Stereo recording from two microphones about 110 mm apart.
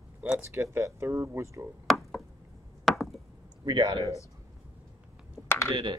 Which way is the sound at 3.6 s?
45° right (ahead or behind).